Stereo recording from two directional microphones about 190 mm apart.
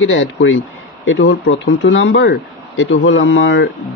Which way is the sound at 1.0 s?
70° left (ahead or behind).